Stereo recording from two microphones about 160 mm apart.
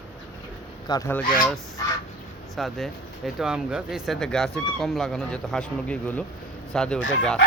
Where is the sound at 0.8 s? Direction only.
25° left (ahead or behind).